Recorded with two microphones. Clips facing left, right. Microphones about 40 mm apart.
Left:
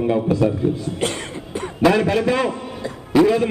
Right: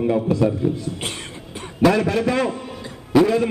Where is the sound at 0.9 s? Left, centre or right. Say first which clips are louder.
Left 6 dB; left.